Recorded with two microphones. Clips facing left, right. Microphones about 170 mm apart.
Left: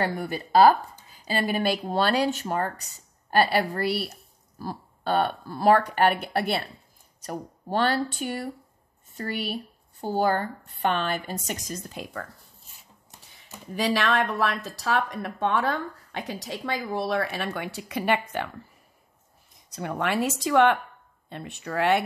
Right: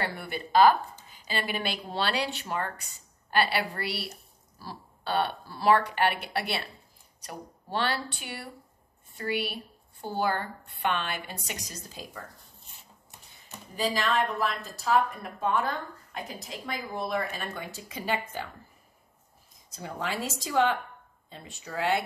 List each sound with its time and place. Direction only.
0.0 s a woman's voice: 40° left (ahead or behind); by 12.2 s 65° left (ahead or behind)
13.7 s speech: 75° left (ahead or behind)
19.7 s speech: 65° left (ahead or behind)